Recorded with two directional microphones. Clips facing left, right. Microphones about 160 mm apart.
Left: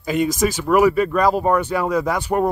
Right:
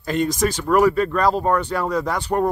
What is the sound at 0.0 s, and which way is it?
Speech, 5° left (ahead or behind).